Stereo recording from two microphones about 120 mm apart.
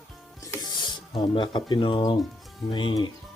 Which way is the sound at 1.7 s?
45° left (ahead or behind).